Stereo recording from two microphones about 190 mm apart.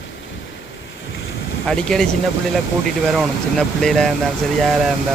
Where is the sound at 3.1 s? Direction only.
Centre (ahead or behind).